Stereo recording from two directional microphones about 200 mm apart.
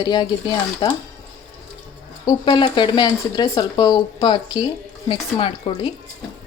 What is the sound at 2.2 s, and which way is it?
Speech, 20° left (ahead or behind).